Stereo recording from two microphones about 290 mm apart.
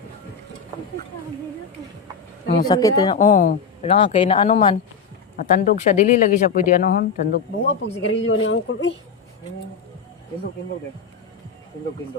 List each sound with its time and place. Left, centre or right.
2.6 s speech: centre
3.2 s speech: left